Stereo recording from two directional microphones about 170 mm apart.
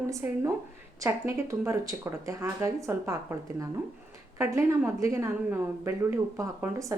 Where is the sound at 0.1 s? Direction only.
15° right (ahead or behind).